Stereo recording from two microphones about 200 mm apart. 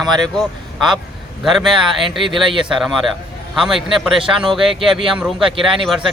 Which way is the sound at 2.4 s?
25° right (ahead or behind).